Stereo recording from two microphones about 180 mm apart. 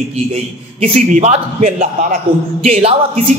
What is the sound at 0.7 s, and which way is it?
A man's voice, 40° right (ahead or behind).